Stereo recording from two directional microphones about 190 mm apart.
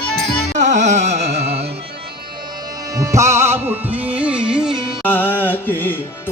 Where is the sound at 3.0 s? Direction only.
15° right (ahead or behind).